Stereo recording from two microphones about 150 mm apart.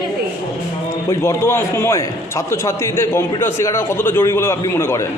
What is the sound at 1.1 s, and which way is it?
A man's voice, 20° left (ahead or behind).